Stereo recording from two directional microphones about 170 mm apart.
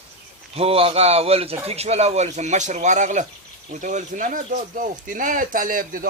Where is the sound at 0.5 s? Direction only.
35° right (ahead or behind).